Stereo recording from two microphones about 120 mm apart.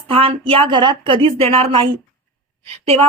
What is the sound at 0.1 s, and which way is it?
Speech, 50° right (ahead or behind).